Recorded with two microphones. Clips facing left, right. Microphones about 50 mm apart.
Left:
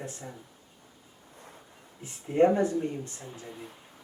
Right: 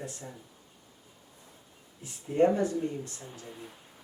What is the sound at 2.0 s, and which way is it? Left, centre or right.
Speech, left.